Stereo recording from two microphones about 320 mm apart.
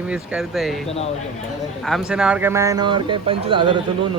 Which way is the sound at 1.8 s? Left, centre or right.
Centre.